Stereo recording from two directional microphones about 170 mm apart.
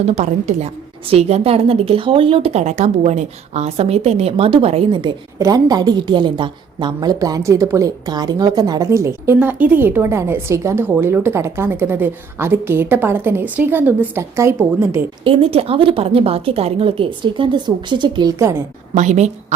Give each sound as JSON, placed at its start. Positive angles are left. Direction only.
{"t": 0.2, "sound": "a woman's voice", "side_deg": -40}
{"t": 5.4, "sound": "a woman's voice", "side_deg": -20}
{"t": 15.2, "sound": "a woman's voice", "side_deg": -35}
{"t": 18.9, "sound": "a woman's voice", "side_deg": -45}